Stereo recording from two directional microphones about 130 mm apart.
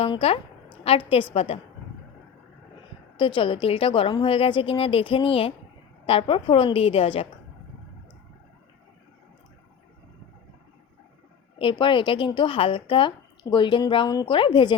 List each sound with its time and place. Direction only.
0.0 s speech: 45° left (ahead or behind)
3.2 s a woman's voice: 40° left (ahead or behind)
11.6 s a woman's voice: 40° left (ahead or behind)